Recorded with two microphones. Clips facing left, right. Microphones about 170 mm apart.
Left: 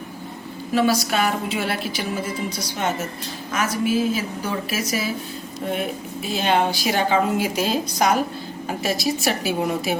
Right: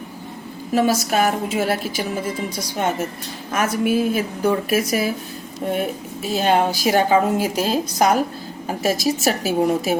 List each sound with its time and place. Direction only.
0.7 s a woman's voice: 45° right (ahead or behind)
3.5 s a woman's voice: 55° right (ahead or behind)
6.3 s a woman's voice: 45° right (ahead or behind)